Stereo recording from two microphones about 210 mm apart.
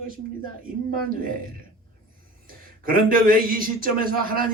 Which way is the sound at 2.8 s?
40° right (ahead or behind).